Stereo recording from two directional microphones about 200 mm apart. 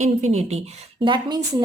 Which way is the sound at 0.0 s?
35° right (ahead or behind).